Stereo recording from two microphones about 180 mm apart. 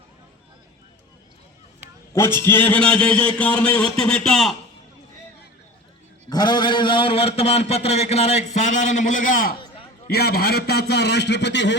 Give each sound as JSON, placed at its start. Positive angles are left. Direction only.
{"t": 2.1, "sound": "a man's voice", "side_deg": 15}
{"t": 6.3, "sound": "a man's voice", "side_deg": 25}
{"t": 9.6, "sound": "a sound", "side_deg": 30}
{"t": 10.1, "sound": "a man's voice", "side_deg": 60}